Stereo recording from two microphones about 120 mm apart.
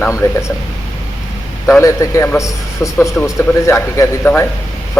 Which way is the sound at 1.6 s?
25° left (ahead or behind).